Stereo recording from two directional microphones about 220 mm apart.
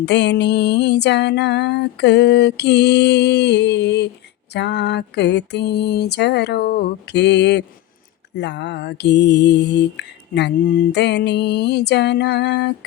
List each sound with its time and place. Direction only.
0.0 s music: 50° left (ahead or behind)